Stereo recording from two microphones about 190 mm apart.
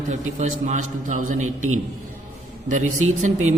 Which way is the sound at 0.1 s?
40° right (ahead or behind).